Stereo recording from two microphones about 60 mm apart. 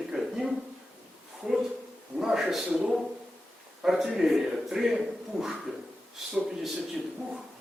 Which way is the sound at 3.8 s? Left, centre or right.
Centre.